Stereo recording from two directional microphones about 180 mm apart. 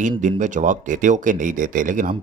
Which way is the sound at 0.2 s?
45° right (ahead or behind).